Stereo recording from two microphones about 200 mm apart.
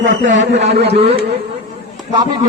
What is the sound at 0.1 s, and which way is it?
Speech, 40° right (ahead or behind).